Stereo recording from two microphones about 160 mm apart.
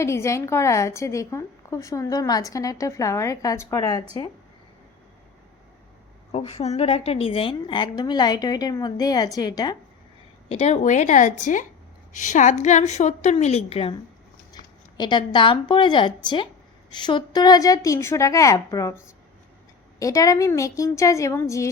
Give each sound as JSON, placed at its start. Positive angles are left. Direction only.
{"t": 0.0, "sound": "a woman's voice", "side_deg": 15}
{"t": 6.3, "sound": "a woman's voice", "side_deg": 40}
{"t": 10.5, "sound": "a woman's voice", "side_deg": 40}
{"t": 14.5, "sound": "a woman's voice", "side_deg": 25}